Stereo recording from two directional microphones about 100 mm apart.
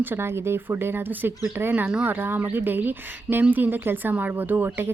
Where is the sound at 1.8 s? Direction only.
10° right (ahead or behind).